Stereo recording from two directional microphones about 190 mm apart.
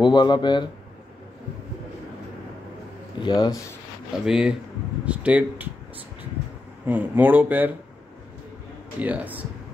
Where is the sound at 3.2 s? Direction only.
20° left (ahead or behind).